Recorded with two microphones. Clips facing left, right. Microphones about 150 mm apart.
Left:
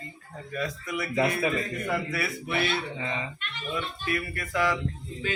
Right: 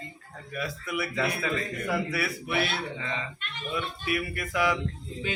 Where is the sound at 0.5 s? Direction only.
5° right (ahead or behind).